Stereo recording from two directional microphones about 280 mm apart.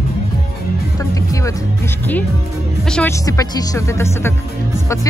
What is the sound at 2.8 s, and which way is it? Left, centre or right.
Speech, centre.